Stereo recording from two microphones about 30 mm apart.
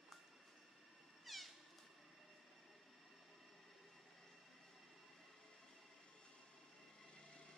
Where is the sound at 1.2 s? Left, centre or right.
Centre.